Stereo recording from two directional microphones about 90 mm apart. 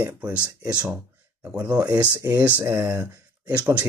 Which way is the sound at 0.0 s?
15° right (ahead or behind).